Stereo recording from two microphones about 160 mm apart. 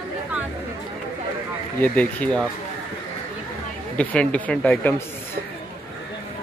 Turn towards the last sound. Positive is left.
turn(degrees=10)  # may be behind; listen again after turning